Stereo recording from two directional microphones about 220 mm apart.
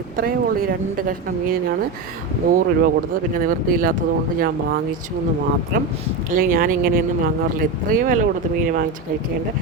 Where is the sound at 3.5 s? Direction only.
40° right (ahead or behind).